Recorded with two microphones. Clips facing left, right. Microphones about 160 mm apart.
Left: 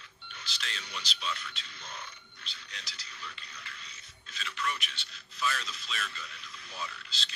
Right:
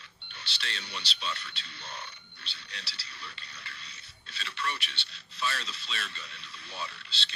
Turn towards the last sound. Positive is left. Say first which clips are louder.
# right 1 dB
turn(degrees=-30)  # may be behind; listen again after turning